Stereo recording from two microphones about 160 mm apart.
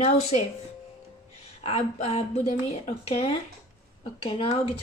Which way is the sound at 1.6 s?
40° left (ahead or behind).